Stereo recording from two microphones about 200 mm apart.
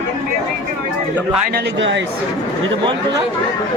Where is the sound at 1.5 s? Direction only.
55° right (ahead or behind).